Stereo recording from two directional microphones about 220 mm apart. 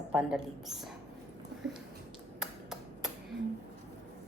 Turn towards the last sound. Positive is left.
turn(degrees=0)  # may be behind; listen again after turning